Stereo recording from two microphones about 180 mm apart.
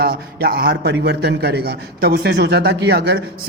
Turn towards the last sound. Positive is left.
turn(degrees=-60)  # may be behind; listen again after turning